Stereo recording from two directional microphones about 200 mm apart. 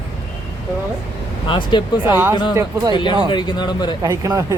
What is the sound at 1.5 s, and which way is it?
Speech, 25° left (ahead or behind).